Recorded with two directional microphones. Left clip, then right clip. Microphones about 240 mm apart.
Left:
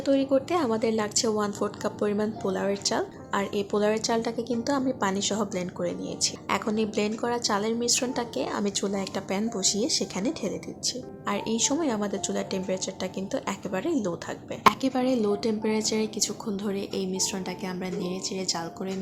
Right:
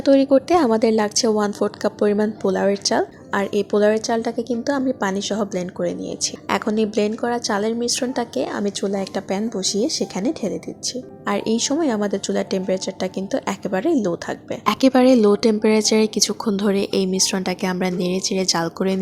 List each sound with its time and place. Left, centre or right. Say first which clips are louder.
0.0 s speech: right 9 dB; right
14.7 s a woman's voice: right 11 dB; right